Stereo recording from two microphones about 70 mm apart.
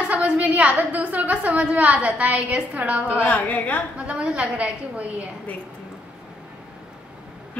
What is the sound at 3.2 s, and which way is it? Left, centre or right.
Speech, left.